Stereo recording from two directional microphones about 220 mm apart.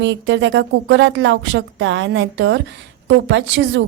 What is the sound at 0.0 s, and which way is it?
A woman's voice, 55° right (ahead or behind).